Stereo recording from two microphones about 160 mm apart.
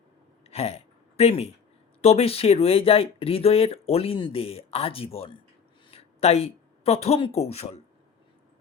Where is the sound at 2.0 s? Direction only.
40° left (ahead or behind).